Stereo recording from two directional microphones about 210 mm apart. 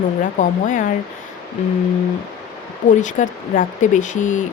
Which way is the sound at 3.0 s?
35° left (ahead or behind).